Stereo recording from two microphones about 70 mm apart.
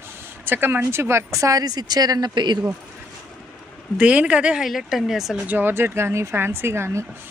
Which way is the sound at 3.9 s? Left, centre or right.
Centre.